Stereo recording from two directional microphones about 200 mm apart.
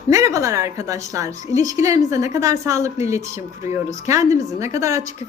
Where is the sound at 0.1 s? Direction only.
15° right (ahead or behind).